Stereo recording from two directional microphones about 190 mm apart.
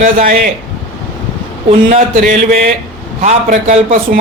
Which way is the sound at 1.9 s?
40° right (ahead or behind).